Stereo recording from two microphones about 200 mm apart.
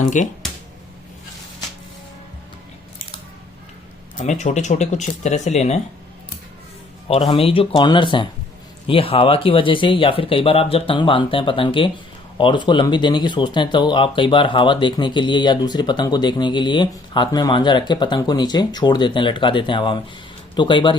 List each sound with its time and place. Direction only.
0.0 s speech: 40° left (ahead or behind)
4.2 s speech: 35° left (ahead or behind)
7.1 s speech: 30° left (ahead or behind)